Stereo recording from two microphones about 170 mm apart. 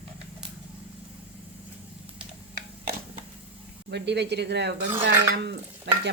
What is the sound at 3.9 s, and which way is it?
Speech, 90° right.